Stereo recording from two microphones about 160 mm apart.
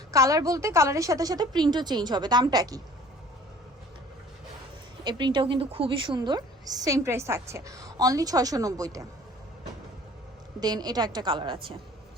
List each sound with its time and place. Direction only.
0.1 s a woman's voice: 20° right (ahead or behind)
5.0 s a woman's voice: 30° right (ahead or behind)
10.6 s a woman's voice: 25° right (ahead or behind)